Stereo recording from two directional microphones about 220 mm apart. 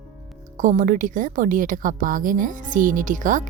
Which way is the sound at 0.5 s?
35° right (ahead or behind).